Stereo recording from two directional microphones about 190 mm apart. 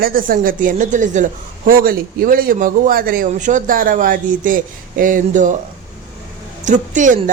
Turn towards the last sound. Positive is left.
turn(degrees=-40)  # may be behind; listen again after turning